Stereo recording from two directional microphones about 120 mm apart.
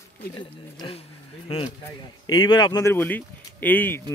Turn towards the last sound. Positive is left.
turn(degrees=15)  # may be behind; listen again after turning